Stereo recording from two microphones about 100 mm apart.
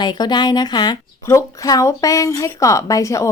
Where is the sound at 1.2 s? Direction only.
30° left (ahead or behind).